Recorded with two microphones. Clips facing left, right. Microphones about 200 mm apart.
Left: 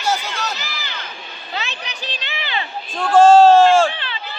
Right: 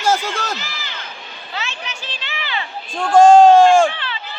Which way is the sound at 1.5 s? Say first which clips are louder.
Even; 20° left (ahead or behind).